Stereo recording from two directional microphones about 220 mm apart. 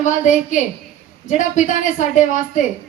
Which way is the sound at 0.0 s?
35° left (ahead or behind).